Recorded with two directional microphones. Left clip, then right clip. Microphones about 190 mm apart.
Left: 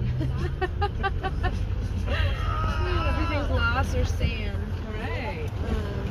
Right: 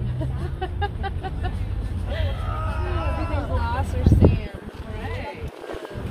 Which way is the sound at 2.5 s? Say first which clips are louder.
Left 1 dB; 50° right (ahead or behind).